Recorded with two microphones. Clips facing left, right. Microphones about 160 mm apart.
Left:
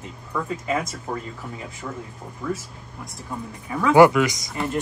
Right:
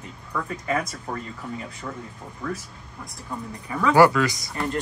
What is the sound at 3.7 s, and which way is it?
Speech, 15° left (ahead or behind).